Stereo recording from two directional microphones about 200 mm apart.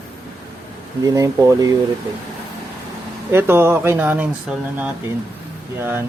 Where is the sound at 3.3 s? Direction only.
10° right (ahead or behind).